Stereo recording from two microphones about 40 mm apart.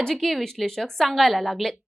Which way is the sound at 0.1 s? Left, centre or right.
Centre.